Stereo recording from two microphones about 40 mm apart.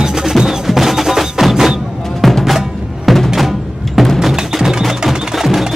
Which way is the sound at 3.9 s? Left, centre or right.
Centre.